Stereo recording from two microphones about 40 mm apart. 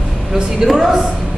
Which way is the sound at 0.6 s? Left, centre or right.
Centre.